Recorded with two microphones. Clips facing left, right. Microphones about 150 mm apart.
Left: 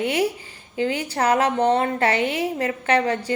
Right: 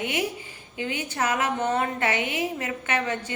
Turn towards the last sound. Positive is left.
turn(degrees=35)  # may be behind; listen again after turning